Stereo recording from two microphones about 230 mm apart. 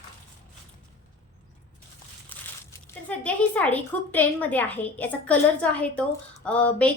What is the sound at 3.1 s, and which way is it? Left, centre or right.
A woman's voice, centre.